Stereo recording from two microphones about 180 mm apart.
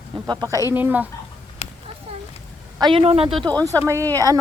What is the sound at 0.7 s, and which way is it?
Speech, 10° right (ahead or behind).